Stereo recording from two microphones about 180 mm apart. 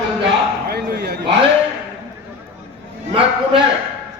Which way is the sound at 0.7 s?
60° right (ahead or behind).